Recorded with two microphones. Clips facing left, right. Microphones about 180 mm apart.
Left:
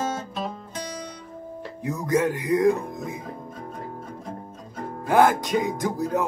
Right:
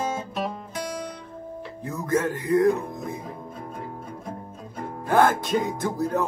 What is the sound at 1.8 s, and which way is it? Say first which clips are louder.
Music: left 2 dB; 15° left (ahead or behind).